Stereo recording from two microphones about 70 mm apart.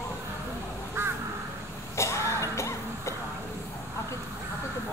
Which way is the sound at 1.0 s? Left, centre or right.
Right.